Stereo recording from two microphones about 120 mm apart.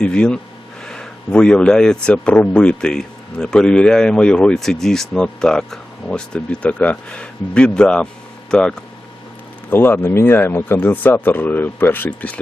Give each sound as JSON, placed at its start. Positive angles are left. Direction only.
{"t": 0.0, "sound": "speech", "side_deg": 10}
{"t": 9.6, "sound": "speech", "side_deg": 15}